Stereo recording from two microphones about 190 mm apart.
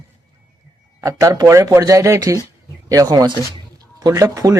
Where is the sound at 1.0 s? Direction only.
15° right (ahead or behind).